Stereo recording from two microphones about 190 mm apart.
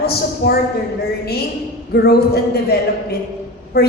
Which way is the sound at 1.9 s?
55° left (ahead or behind).